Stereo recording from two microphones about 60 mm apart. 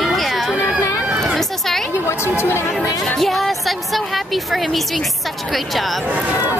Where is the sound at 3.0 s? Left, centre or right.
Centre.